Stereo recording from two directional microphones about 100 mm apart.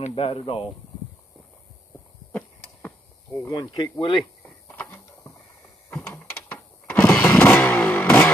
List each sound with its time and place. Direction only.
0.0 s speech: 70° left (ahead or behind)
3.3 s speech: 35° left (ahead or behind)
4.6 s a sound: 15° left (ahead or behind)
7.3 s vehicle: 15° left (ahead or behind)